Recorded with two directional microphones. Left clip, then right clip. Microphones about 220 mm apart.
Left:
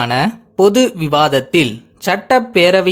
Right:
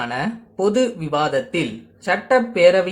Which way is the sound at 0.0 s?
45° left (ahead or behind).